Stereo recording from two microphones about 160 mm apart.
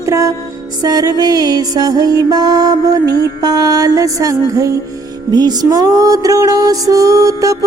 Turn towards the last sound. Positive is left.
turn(degrees=-20)  # may be behind; listen again after turning